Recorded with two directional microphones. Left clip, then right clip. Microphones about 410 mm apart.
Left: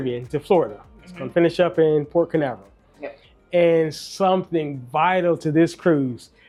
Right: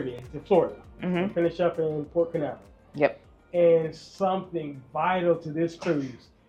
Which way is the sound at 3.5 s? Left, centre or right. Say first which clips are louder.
Left 4 dB; left.